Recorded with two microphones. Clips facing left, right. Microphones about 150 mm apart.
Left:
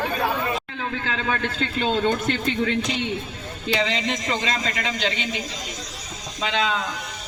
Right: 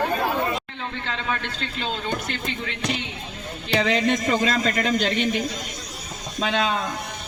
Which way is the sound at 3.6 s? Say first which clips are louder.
Right 3 dB; 55° right (ahead or behind).